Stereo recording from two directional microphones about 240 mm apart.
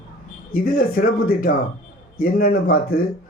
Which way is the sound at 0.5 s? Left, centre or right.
Left.